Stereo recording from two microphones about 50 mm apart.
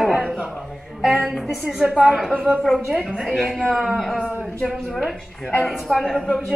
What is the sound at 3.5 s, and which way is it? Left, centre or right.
Speech, centre.